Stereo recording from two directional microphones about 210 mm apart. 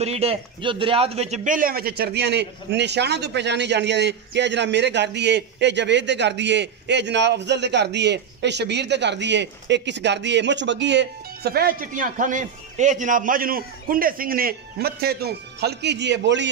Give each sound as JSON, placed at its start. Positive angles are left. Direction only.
{"t": 0.0, "sound": "a man's voice", "side_deg": -30}